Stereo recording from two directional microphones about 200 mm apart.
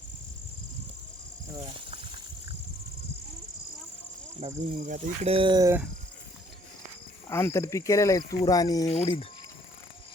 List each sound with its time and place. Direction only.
4.4 s speech: 35° right (ahead or behind); by 5.8 s 15° right (ahead or behind)
7.3 s speech: 15° left (ahead or behind)